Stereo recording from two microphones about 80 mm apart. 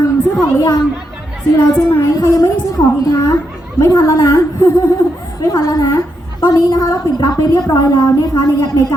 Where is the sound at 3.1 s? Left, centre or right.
Left.